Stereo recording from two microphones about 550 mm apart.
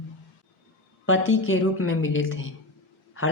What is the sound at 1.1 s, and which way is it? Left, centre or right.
Speech, left.